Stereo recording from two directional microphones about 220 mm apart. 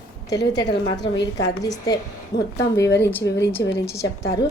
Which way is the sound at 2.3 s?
50° left (ahead or behind).